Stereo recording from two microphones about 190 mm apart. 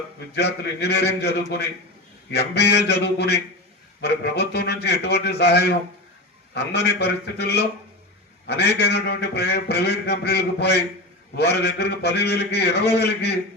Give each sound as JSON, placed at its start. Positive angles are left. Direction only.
{"t": 0.3, "sound": "a man's voice", "side_deg": 60}